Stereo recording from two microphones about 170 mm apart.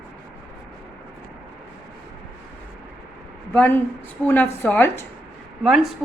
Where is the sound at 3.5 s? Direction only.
10° left (ahead or behind).